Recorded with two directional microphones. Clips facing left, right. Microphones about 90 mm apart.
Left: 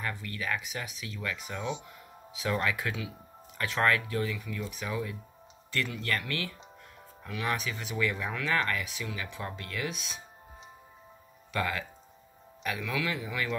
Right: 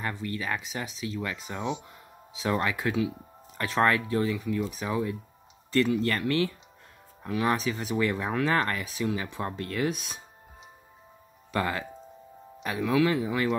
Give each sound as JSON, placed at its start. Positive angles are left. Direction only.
{"t": 0.0, "sound": "speech", "side_deg": -25}
{"t": 11.5, "sound": "speech", "side_deg": -30}